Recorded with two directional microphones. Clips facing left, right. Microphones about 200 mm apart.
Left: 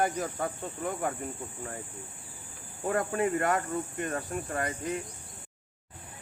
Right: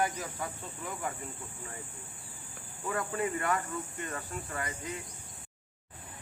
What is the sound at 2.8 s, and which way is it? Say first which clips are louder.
Speech: left 5 dB; 50° left (ahead or behind).